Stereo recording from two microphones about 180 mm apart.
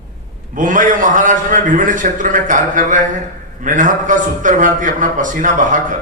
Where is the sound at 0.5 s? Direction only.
45° right (ahead or behind).